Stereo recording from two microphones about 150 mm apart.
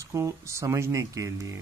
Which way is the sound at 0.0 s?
20° right (ahead or behind).